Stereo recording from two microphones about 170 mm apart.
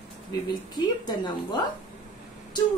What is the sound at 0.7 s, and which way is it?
Speech, 25° left (ahead or behind).